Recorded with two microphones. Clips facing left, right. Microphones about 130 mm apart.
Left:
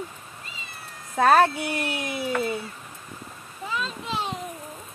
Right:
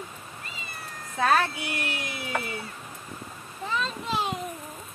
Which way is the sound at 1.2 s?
50° left (ahead or behind).